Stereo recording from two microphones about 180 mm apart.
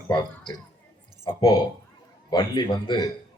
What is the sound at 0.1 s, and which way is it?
A man's voice, 25° left (ahead or behind).